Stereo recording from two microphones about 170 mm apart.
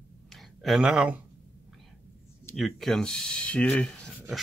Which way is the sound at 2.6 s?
Centre (ahead or behind).